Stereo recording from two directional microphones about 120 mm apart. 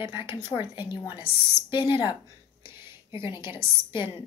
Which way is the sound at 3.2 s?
40° left (ahead or behind).